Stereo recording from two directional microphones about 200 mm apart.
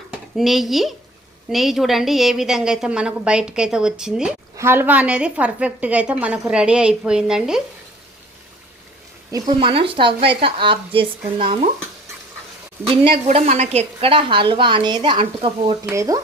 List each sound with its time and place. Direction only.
0.3 s a woman's voice: centre (ahead or behind)
9.3 s a woman's voice: 25° right (ahead or behind)
12.8 s a woman's voice: 30° right (ahead or behind)
15.9 s speech: 15° right (ahead or behind)